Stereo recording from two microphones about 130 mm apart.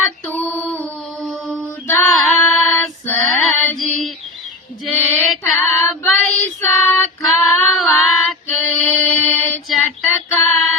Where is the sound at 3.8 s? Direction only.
10° left (ahead or behind).